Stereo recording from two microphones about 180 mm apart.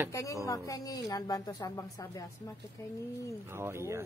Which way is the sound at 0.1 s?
15° left (ahead or behind).